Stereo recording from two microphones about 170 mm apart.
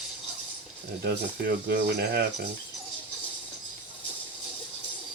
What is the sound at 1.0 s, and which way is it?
Speech, 65° right (ahead or behind).